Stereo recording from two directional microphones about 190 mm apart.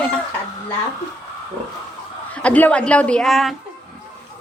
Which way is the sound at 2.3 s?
5° left (ahead or behind).